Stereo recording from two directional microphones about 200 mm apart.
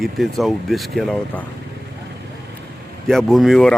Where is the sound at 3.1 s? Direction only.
Centre (ahead or behind).